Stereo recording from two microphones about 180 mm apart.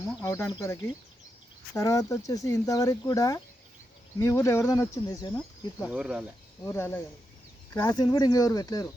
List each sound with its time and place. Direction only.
0.0 s speech: 15° left (ahead or behind)
5.9 s speech: 5° right (ahead or behind)
6.7 s speech: 15° left (ahead or behind)